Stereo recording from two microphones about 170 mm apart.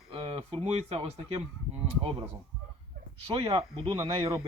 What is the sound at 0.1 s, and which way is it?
Speech, 35° right (ahead or behind).